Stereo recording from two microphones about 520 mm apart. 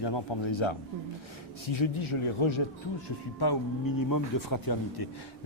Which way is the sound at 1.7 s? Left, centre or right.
Left.